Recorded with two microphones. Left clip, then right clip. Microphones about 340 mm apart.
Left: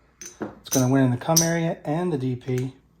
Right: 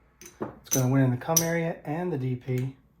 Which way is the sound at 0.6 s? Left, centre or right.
Left.